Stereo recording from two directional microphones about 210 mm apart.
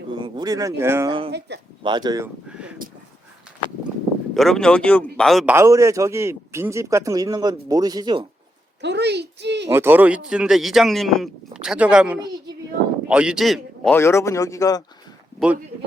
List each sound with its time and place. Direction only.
0.1 s speech: 20° right (ahead or behind)
1.3 s speech: 55° right (ahead or behind)
1.8 s speech: 20° right (ahead or behind)
2.5 s a sound: 5° right (ahead or behind)
4.4 s speech: centre (ahead or behind)
5.5 s a man's voice: 15° right (ahead or behind)
8.8 s a child's voice: 55° right (ahead or behind)
9.6 s a man's voice: 10° right (ahead or behind); by 14.8 s 15° left (ahead or behind)